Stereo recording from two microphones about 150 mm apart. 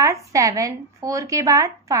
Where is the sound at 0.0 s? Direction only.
20° right (ahead or behind).